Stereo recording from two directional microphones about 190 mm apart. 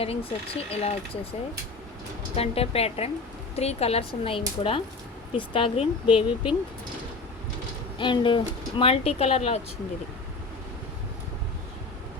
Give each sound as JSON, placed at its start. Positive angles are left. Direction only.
{"t": 0.0, "sound": "speech", "side_deg": 30}
{"t": 2.3, "sound": "speech", "side_deg": 30}
{"t": 7.9, "sound": "speech", "side_deg": 25}